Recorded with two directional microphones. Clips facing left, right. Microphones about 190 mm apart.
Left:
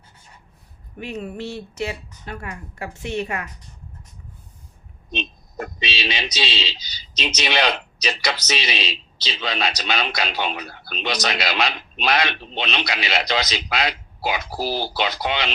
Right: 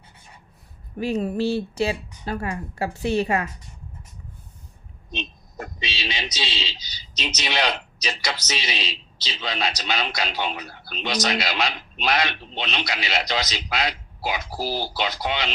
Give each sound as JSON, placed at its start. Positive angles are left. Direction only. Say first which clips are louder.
{"t": 0.9, "sound": "speech", "louder": "right 6 dB", "side_deg": -35}
{"t": 5.1, "sound": "speech", "louder": "left 4 dB", "side_deg": 70}